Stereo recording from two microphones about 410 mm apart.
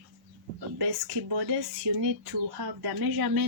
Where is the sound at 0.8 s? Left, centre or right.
Right.